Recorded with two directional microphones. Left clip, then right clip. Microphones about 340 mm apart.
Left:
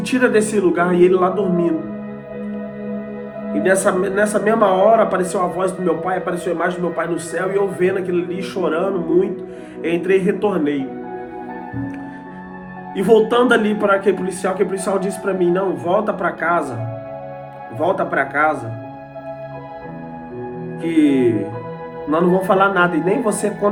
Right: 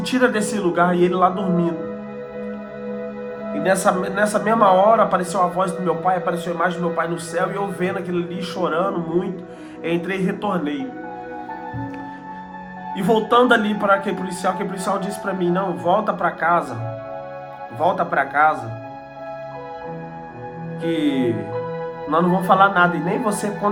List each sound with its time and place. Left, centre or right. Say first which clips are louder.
0.1 s speech: left 4 dB; centre
3.5 s speech: left 2 dB; centre
13.0 s speech: left 3 dB; centre
17.7 s speech: left 1 dB; centre
20.8 s speech: left 5 dB; centre